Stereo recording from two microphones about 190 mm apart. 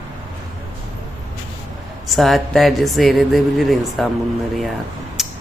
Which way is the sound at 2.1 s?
Centre (ahead or behind).